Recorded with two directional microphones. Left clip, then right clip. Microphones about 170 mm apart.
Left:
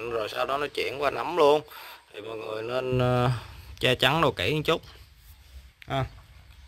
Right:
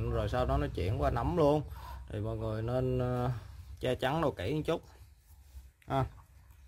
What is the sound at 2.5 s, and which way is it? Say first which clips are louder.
Speech: left 7 dB; 20° left (ahead or behind).